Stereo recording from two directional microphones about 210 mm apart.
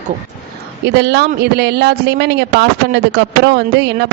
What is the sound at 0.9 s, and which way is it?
Speech, 55° right (ahead or behind).